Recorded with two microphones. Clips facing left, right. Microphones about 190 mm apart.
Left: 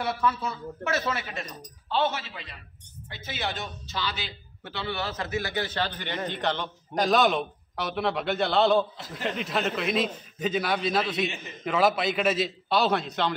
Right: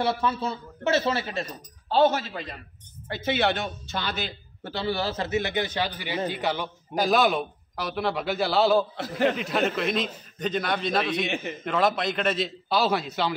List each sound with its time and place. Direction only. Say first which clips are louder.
0.0 s speech: right 2 dB; 30° right (ahead or behind); by 2.6 s 45° right (ahead or behind)
3.3 s a man's voice: right 8 dB; 65° right (ahead or behind); by 13.3 s 5° right (ahead or behind)